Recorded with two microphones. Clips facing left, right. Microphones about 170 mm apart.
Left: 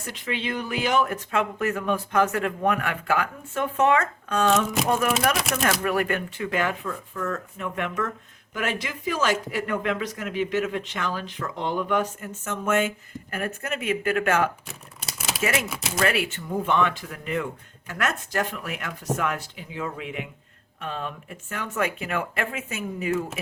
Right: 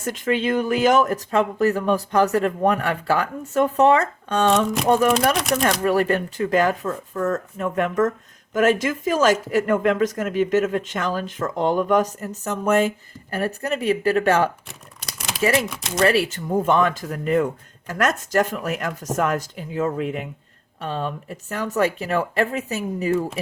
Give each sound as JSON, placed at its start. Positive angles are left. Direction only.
{"t": 0.0, "sound": "speech", "side_deg": -45}
{"t": 4.5, "sound": "speech", "side_deg": 0}
{"t": 5.8, "sound": "speech", "side_deg": -35}
{"t": 14.7, "sound": "typewriter", "side_deg": 0}
{"t": 15.4, "sound": "speech", "side_deg": -35}